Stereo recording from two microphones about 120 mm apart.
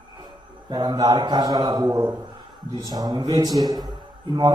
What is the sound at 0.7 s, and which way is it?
A man's voice, 40° right (ahead or behind).